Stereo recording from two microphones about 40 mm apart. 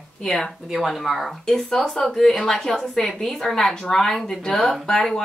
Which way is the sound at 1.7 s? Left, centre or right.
Centre.